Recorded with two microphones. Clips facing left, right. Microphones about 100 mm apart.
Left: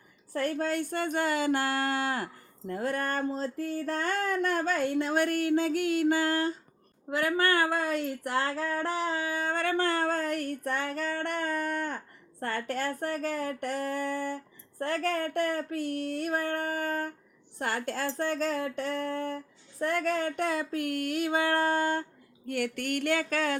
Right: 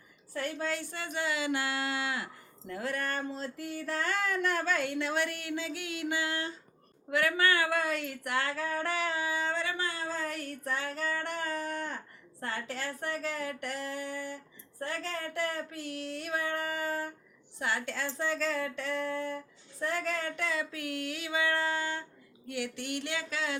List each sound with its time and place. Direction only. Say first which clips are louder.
0.3 s speech: left 5 dB; 45° left (ahead or behind)
19.8 s a woman's voice: left 5 dB; 60° left (ahead or behind)
20.1 s speech: left 5 dB; 45° left (ahead or behind)